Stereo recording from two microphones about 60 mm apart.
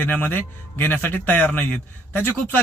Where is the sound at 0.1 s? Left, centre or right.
Left.